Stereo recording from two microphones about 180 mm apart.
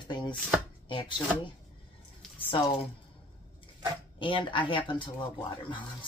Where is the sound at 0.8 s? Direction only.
25° left (ahead or behind).